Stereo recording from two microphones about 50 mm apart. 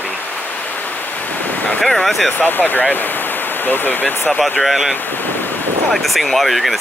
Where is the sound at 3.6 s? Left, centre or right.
Left.